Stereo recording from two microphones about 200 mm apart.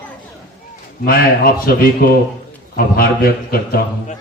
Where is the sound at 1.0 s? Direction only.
50° left (ahead or behind).